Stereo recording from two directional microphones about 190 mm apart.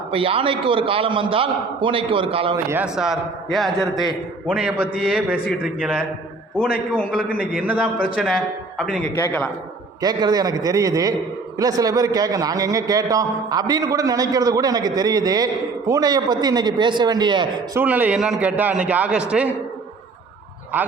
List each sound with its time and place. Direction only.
0.1 s a man's voice: 30° right (ahead or behind)
2.6 s a man's voice: 10° right (ahead or behind)
7.3 s a man's voice: 5° right (ahead or behind)
9.1 s a man's voice: 10° left (ahead or behind)
10.0 s a man's voice: 20° right (ahead or behind)
17.7 s a man's voice: 10° right (ahead or behind)